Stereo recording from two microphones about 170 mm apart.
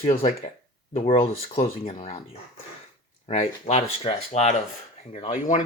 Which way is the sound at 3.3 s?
40° left (ahead or behind).